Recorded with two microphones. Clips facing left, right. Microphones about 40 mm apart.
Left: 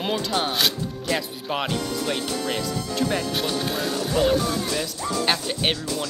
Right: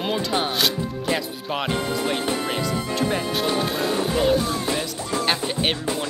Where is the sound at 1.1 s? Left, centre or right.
Right.